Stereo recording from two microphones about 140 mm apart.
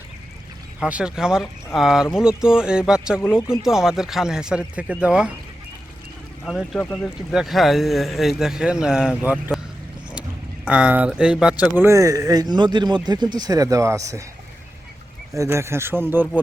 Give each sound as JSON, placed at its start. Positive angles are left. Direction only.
{"t": 0.8, "sound": "speech", "side_deg": -5}
{"t": 6.4, "sound": "speech", "side_deg": 0}
{"t": 10.7, "sound": "speech", "side_deg": -10}
{"t": 11.9, "sound": "speech", "side_deg": -25}
{"t": 15.4, "sound": "speech", "side_deg": -20}